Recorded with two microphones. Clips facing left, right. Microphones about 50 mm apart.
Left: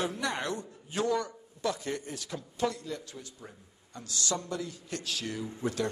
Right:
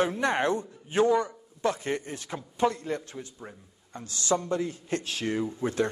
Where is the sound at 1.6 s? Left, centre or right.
Right.